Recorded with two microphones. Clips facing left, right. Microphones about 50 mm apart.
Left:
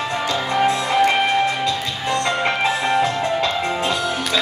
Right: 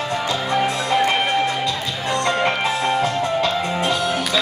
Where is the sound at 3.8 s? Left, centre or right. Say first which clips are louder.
Right 1 dB; right.